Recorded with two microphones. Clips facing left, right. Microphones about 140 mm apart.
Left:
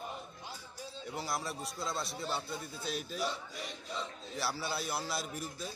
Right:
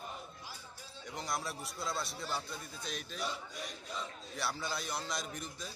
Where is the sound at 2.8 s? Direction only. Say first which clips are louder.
Left 4 dB; 5° left (ahead or behind).